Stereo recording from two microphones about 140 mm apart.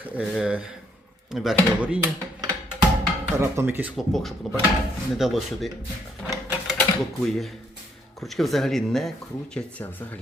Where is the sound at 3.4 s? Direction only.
15° right (ahead or behind).